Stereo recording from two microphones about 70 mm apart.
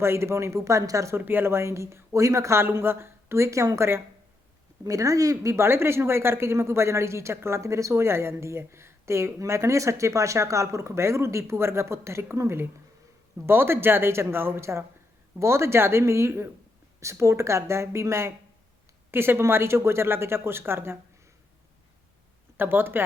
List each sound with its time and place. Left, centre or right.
0.0 s speech: right
1.1 s speech: right
22.5 s speech: right